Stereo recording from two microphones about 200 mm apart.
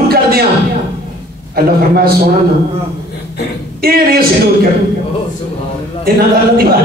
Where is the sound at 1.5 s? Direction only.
50° right (ahead or behind).